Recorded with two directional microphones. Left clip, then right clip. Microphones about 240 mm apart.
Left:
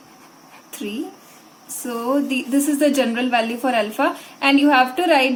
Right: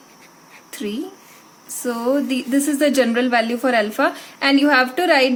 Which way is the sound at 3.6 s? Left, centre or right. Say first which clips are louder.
Right 2 dB; right.